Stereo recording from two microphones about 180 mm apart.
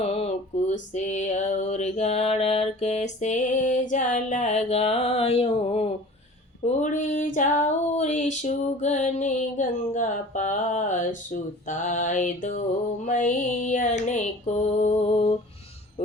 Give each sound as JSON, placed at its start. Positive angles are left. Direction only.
{"t": 0.0, "sound": "a sound", "side_deg": 35}
{"t": 6.8, "sound": "female singing", "side_deg": 45}
{"t": 16.0, "sound": "speech", "side_deg": 35}